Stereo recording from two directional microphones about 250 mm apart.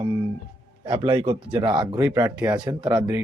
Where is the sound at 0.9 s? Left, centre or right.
Centre.